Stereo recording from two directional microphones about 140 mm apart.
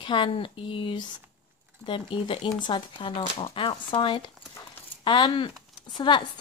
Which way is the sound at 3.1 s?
50° left (ahead or behind).